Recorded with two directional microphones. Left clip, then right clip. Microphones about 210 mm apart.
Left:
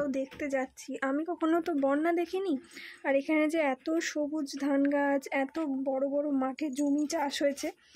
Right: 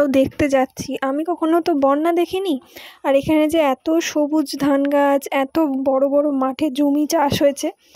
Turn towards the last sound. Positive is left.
turn(degrees=-35)  # may be behind; listen again after turning